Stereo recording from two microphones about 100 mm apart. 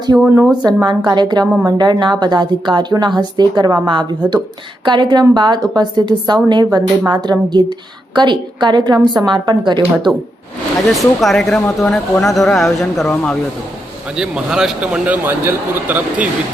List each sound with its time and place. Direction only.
0.1 s speech: 15° right (ahead or behind)
0.6 s a woman's voice: 40° right (ahead or behind)
10.9 s a man's voice: centre (ahead or behind)
14.2 s speech: 5° right (ahead or behind)